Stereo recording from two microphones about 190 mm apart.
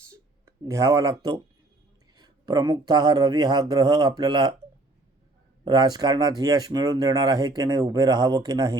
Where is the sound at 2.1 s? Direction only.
20° right (ahead or behind).